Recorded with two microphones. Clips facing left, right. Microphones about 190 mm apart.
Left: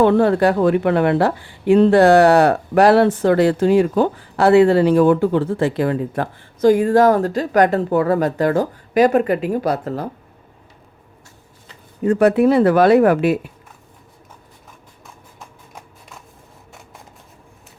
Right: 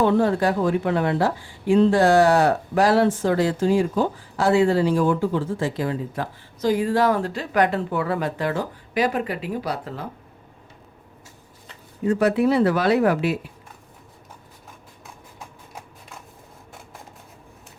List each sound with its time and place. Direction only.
0.0 s speech: 65° left (ahead or behind); by 10.1 s 45° left (ahead or behind)
12.0 s speech: 55° left (ahead or behind)